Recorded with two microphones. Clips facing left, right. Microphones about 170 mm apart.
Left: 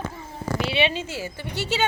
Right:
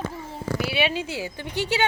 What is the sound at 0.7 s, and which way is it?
Speech, 10° right (ahead or behind).